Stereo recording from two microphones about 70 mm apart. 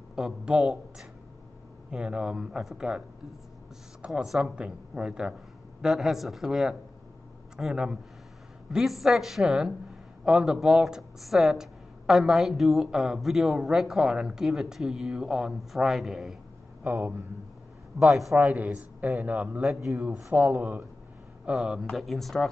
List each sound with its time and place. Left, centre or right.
0.1 s speech: centre
4.0 s speech: centre
16.8 s speech: right
17.9 s speech: centre
18.4 s speech: right
21.5 s speech: centre
21.9 s speech: centre